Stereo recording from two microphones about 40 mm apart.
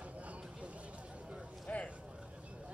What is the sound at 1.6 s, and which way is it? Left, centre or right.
Vehicle, left.